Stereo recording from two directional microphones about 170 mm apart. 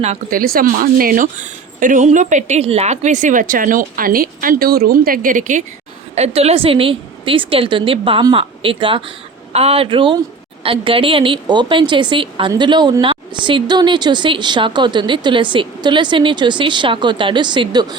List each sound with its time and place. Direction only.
0.0 s speech: 40° right (ahead or behind)
0.3 s a woman's voice: 60° right (ahead or behind); by 17.9 s 25° right (ahead or behind)